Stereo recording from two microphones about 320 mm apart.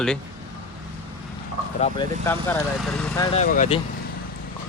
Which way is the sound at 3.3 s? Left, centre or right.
Left.